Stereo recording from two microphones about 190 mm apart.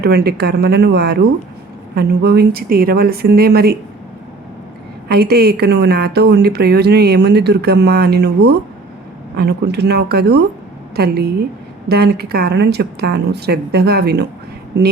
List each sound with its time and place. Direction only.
0.0 s a woman's voice: 60° right (ahead or behind)
5.0 s a woman's voice: 55° right (ahead or behind)